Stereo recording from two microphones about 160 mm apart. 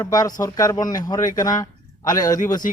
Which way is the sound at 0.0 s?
25° left (ahead or behind).